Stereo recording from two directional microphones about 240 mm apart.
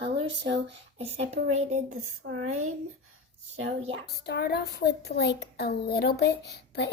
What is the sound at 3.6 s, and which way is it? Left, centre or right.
Speech, right.